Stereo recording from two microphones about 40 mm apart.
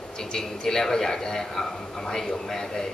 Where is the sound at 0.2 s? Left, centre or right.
Centre.